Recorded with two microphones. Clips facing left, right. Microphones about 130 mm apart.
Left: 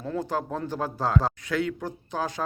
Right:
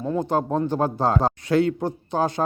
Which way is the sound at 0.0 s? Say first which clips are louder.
Right 6 dB; 25° right (ahead or behind).